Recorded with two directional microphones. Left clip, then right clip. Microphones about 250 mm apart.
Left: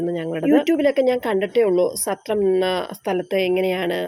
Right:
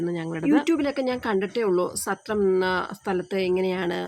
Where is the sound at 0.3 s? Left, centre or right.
Right.